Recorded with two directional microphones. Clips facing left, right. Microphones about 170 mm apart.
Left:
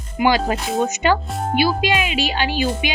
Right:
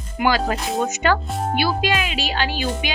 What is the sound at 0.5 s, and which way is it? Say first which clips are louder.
Speech: left 2 dB; centre (ahead or behind).